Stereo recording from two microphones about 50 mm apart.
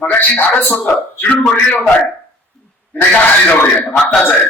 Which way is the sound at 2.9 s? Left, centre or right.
Left.